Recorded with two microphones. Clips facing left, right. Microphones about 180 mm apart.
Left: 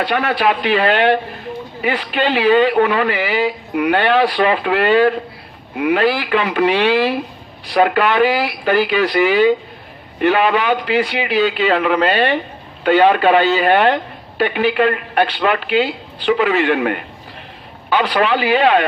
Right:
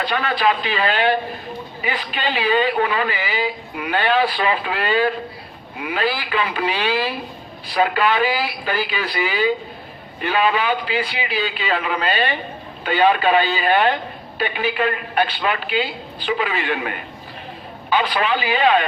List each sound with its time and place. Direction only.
0.0 s a man's voice: 70° left (ahead or behind)